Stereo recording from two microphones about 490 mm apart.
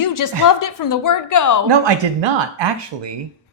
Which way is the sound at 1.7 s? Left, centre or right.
Right.